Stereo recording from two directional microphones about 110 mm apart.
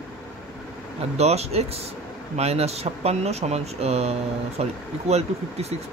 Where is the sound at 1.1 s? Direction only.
75° right (ahead or behind).